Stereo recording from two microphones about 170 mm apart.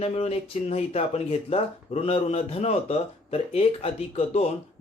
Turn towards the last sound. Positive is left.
turn(degrees=35)  # may be behind; listen again after turning